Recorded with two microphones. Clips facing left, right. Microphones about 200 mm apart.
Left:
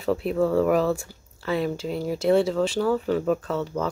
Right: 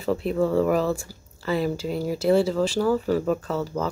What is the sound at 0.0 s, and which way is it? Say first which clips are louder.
Speech: even; centre (ahead or behind).